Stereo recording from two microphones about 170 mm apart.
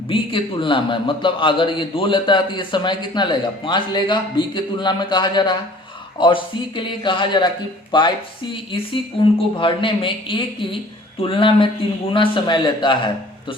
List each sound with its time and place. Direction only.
0.1 s a man's voice: 30° left (ahead or behind)